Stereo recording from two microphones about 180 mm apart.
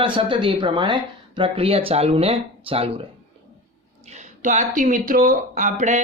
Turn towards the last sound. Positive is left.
turn(degrees=-45)  # may be behind; listen again after turning